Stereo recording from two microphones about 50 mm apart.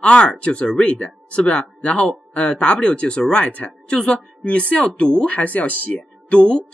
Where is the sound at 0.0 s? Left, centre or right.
Centre.